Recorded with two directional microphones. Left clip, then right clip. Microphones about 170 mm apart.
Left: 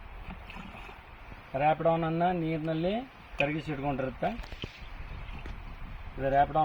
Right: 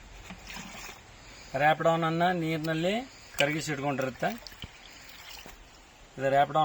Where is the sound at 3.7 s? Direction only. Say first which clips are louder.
Right 2 dB; 20° right (ahead or behind).